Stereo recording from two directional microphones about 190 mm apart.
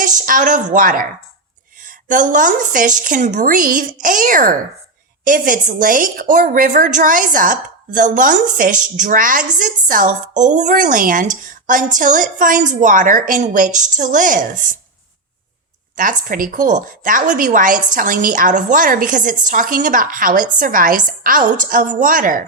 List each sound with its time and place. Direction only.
0.0 s a woman's voice: 45° right (ahead or behind)
16.0 s a woman's voice: 45° right (ahead or behind)